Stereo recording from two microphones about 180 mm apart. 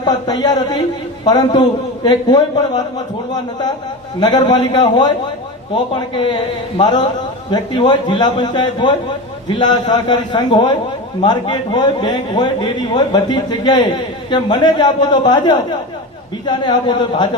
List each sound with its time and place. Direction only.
0.0 s a man's voice: 25° left (ahead or behind)
4.2 s a man's voice: 25° left (ahead or behind)